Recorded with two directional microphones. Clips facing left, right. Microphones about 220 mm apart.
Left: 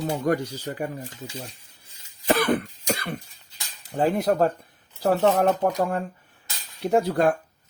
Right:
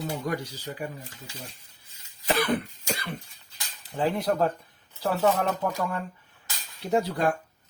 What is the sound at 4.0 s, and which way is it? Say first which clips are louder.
Speech: left 4 dB; 45° left (ahead or behind).